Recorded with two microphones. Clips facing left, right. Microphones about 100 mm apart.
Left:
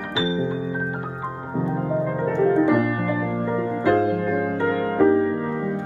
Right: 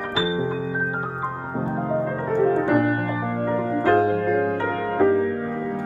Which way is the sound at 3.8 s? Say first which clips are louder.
Right 1 dB; 20° left (ahead or behind).